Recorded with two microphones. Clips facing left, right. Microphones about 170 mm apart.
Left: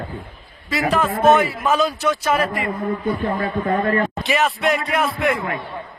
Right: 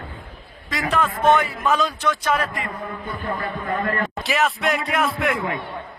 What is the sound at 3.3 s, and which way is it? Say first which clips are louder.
Speech: left 5 dB; 45° left (ahead or behind).